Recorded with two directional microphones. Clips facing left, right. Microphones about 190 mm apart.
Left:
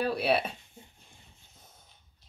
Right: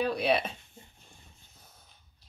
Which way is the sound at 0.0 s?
5° left (ahead or behind).